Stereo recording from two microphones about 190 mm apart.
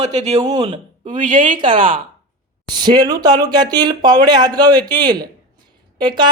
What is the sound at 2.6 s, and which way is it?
Speech, 20° right (ahead or behind).